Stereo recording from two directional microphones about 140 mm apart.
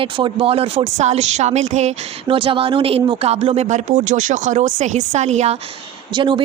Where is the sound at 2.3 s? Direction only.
40° right (ahead or behind).